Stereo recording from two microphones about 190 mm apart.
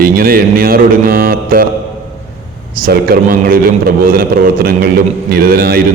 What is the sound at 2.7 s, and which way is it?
A man's voice, 50° right (ahead or behind).